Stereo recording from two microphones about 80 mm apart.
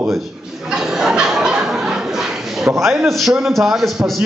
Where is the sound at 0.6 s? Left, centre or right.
Centre.